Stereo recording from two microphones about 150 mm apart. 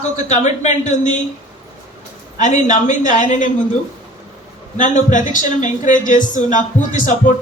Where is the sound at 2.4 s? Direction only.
55° left (ahead or behind).